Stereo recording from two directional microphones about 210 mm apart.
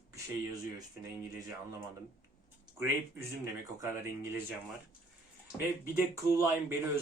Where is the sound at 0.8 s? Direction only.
15° right (ahead or behind).